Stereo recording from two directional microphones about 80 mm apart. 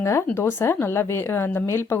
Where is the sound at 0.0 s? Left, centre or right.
Left.